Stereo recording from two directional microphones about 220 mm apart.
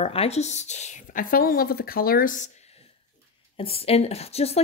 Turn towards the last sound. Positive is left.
turn(degrees=30)  # may be behind; listen again after turning